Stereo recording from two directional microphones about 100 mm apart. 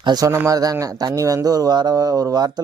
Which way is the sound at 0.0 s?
45° right (ahead or behind).